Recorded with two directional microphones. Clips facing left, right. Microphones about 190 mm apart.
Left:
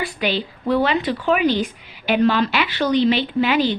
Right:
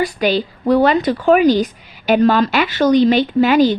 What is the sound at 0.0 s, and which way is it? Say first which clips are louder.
A woman's voice: right 6 dB; 40° right (ahead or behind).